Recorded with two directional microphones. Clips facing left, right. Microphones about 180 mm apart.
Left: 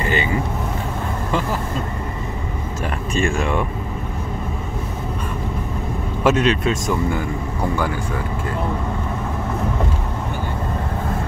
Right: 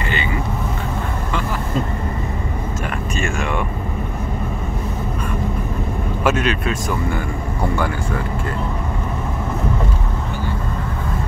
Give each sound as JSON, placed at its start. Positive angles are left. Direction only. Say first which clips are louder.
{"t": 3.2, "sound": "vehicle", "louder": "left 4 dB", "side_deg": 30}
{"t": 6.2, "sound": "speech", "louder": "left 3 dB", "side_deg": 30}